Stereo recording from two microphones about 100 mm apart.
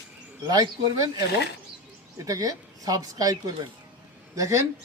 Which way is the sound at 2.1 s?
35° right (ahead or behind).